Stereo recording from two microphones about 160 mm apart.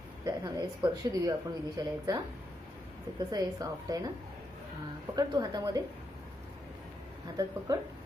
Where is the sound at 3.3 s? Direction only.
25° right (ahead or behind).